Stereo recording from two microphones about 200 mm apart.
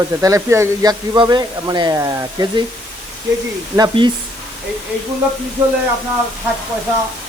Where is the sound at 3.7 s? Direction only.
20° right (ahead or behind).